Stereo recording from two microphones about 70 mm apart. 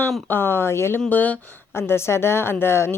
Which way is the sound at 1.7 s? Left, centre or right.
Left.